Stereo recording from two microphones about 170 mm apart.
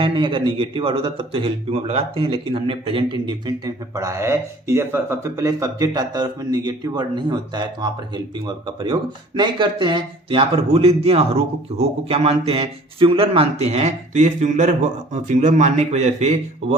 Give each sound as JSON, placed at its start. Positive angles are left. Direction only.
{"t": 0.0, "sound": "speech", "side_deg": -30}